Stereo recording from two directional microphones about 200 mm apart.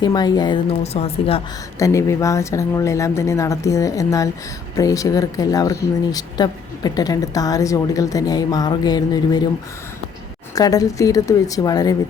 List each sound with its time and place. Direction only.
0.0 s speech: 20° left (ahead or behind)
1.8 s speech: 15° left (ahead or behind)
10.5 s speech: 20° left (ahead or behind)